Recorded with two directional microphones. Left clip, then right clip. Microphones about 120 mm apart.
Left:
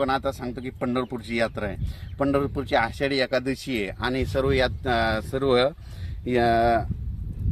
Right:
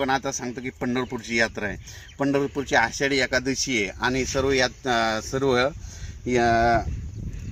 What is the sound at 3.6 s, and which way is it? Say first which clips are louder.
Speech: right 4 dB; 40° left (ahead or behind).